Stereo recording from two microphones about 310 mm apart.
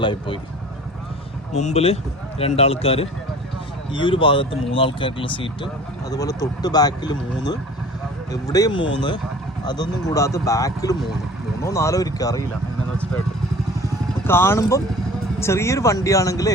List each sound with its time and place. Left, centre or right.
0.0 s speech: centre
1.5 s a man's voice: left
13.8 s vehicle: centre
15.4 s speech: centre